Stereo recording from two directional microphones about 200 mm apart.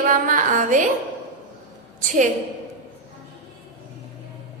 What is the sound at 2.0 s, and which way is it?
Speech, 40° right (ahead or behind).